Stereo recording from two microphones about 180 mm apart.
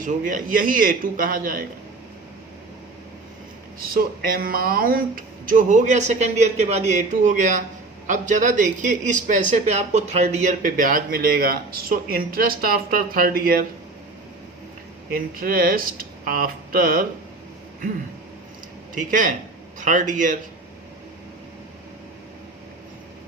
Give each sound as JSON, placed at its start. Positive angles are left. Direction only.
{"t": 0.0, "sound": "a man's voice", "side_deg": -50}
{"t": 3.8, "sound": "a man's voice", "side_deg": -55}
{"t": 15.1, "sound": "a man's voice", "side_deg": -55}
{"t": 18.9, "sound": "a man's voice", "side_deg": -45}